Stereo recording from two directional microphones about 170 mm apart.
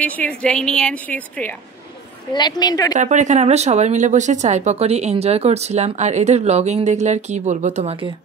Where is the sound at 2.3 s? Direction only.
25° left (ahead or behind).